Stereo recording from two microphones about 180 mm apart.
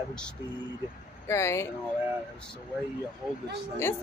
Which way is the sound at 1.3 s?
15° left (ahead or behind).